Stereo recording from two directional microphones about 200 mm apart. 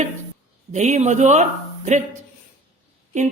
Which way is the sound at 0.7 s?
35° right (ahead or behind).